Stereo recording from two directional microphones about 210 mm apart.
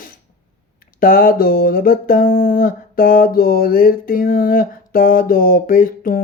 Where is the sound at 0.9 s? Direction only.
40° left (ahead or behind).